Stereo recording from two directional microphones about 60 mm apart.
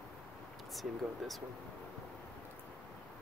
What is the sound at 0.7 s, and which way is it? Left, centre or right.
Speech, centre.